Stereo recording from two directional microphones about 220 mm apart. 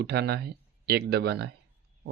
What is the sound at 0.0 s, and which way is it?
Speech, 45° right (ahead or behind).